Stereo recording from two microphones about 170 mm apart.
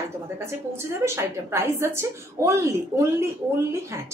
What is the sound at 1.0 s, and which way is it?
A woman's voice, 15° right (ahead or behind).